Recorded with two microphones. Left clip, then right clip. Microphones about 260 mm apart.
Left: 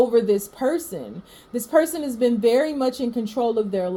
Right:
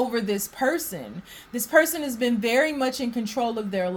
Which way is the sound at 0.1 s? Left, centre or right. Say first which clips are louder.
Left 8 dB; right.